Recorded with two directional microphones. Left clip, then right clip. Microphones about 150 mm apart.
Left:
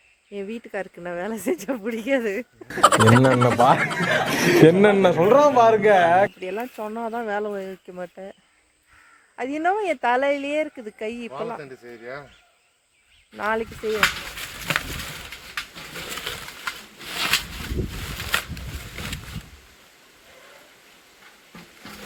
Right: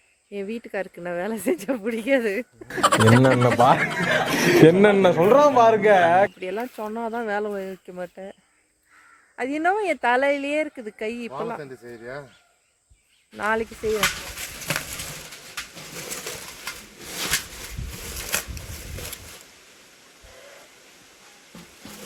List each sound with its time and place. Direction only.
0.3 s speech: 5° left (ahead or behind)
2.6 s speech: centre (ahead or behind)
6.4 s speech: 15° left (ahead or behind)
11.6 s speech: 55° right (ahead or behind)
13.3 s speech: 10° left (ahead or behind)